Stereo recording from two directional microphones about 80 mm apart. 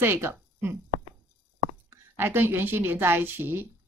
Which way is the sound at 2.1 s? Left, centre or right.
Right.